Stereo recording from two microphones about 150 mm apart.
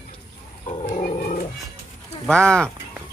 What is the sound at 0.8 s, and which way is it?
Roaring cats, 55° left (ahead or behind).